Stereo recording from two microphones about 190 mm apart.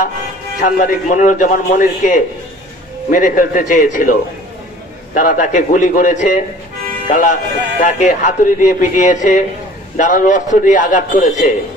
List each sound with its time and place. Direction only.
0.6 s a man's voice: 45° left (ahead or behind)